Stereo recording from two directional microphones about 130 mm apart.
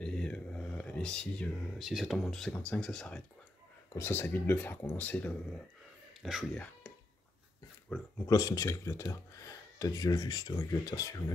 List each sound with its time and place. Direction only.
0.0 s speech: 5° left (ahead or behind)
3.9 s speech: 20° left (ahead or behind)
6.5 s speech: 10° left (ahead or behind)
7.9 s speech: 10° left (ahead or behind)
8.3 s speech: 30° left (ahead or behind)